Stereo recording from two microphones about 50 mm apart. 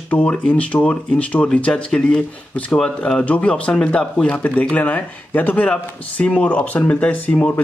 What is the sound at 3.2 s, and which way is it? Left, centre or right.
Speech, left.